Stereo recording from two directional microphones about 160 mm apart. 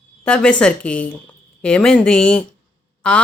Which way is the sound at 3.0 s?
10° left (ahead or behind).